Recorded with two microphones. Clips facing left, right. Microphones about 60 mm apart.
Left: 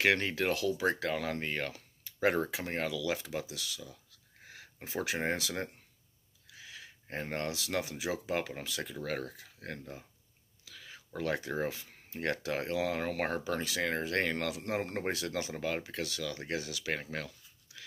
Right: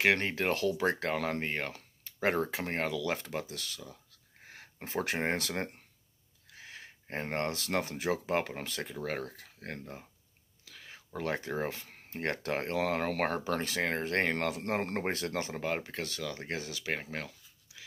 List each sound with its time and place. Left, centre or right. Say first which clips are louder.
0.0 s speech: right 1 dB; right
2.5 s speech: right 2 dB; right
10.6 s whispering: even; right
11.1 s speech: even; right
17.7 s dog: left 1 dB; centre